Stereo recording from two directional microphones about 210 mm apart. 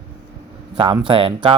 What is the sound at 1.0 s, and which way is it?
Speech, 25° right (ahead or behind).